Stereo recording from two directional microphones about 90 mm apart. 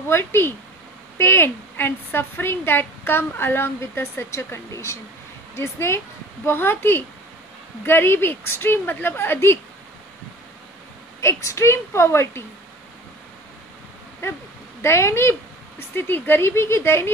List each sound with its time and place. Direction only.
0.1 s a woman's voice: 25° left (ahead or behind)
11.1 s a woman's voice: 30° left (ahead or behind)
14.2 s a woman's voice: 30° left (ahead or behind)